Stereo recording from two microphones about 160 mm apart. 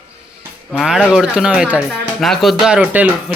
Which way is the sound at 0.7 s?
5° right (ahead or behind).